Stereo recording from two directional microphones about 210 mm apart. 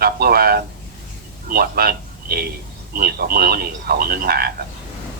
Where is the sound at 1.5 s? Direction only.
45° right (ahead or behind).